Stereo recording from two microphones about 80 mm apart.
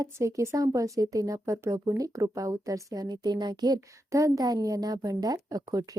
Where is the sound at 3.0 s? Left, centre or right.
Right.